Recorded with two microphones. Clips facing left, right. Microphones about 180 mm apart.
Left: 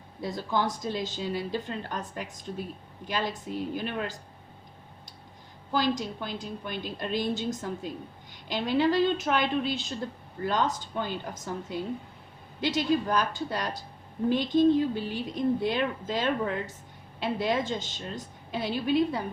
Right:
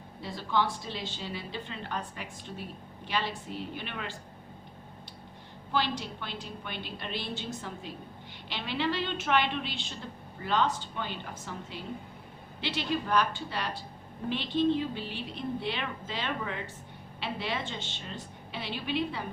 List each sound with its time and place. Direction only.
0.2 s a woman's voice: 45° left (ahead or behind)
5.7 s a woman's voice: 40° left (ahead or behind)